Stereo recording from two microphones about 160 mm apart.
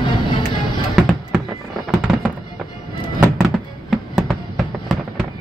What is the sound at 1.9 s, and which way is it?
Fireworks, 5° right (ahead or behind).